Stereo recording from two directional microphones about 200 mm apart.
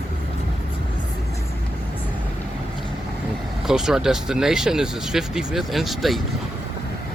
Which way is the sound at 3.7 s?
Centre (ahead or behind).